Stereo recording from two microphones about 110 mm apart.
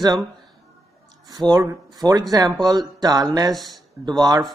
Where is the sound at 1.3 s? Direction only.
35° right (ahead or behind).